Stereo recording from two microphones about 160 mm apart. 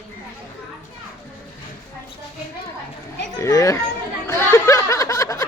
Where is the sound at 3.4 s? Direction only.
20° left (ahead or behind).